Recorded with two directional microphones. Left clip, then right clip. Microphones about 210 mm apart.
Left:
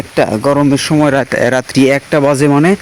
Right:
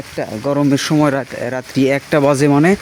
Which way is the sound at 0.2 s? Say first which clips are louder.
Left 9 dB; 30° left (ahead or behind).